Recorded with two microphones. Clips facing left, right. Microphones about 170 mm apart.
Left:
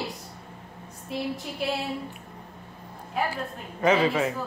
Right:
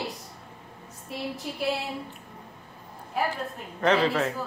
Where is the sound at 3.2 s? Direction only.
Centre (ahead or behind).